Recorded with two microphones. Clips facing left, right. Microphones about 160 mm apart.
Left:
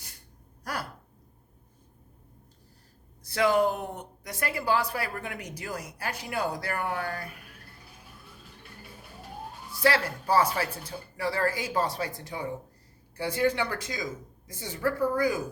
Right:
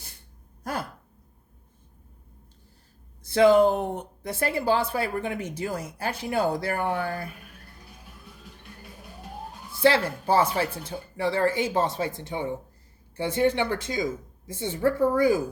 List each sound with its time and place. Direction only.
0.6 s a sound: 25° right (ahead or behind)
3.2 s speech: 25° right (ahead or behind)
9.7 s speech: 25° right (ahead or behind)